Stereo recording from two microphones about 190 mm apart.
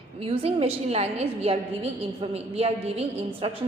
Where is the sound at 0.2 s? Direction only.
30° right (ahead or behind).